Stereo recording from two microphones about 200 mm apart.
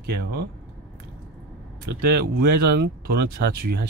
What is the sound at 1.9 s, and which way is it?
Speech, 50° right (ahead or behind).